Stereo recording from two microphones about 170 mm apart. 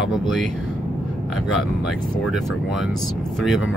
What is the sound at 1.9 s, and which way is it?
Speech, centre (ahead or behind).